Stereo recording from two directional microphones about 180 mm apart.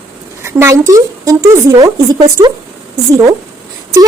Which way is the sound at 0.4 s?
15° right (ahead or behind).